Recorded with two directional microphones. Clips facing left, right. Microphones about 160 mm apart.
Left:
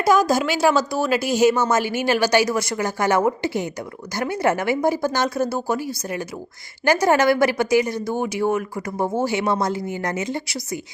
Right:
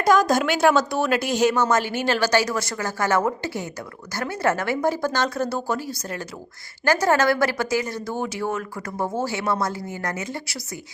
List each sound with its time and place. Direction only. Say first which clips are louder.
0.0 s a woman's voice: left 1 dB; 5° left (ahead or behind)